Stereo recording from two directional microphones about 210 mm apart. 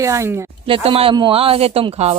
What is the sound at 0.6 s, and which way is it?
Speech, 25° right (ahead or behind).